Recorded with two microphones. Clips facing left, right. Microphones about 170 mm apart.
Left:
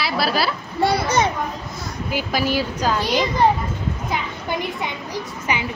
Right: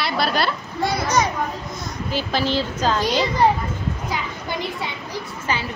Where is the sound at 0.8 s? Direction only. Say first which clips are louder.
Left 2 dB; 30° left (ahead or behind).